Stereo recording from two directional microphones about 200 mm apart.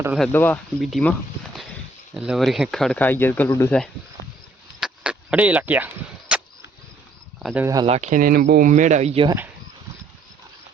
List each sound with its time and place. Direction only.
0.2 s speech: 10° left (ahead or behind)
2.1 s speech: 5° right (ahead or behind)
4.8 s a sound: 5° right (ahead or behind)
7.4 s speech: 10° right (ahead or behind)
7.9 s speech: 35° right (ahead or behind)